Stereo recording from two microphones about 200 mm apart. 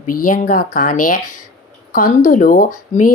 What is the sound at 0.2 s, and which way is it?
Speech, 40° left (ahead or behind).